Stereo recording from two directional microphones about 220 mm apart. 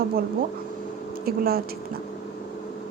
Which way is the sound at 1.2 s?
45° right (ahead or behind).